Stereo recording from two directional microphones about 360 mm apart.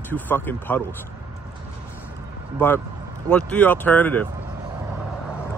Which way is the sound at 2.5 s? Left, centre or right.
Centre.